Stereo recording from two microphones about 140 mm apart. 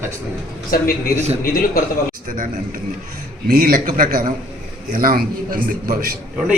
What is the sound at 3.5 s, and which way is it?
A man's voice, 90° right.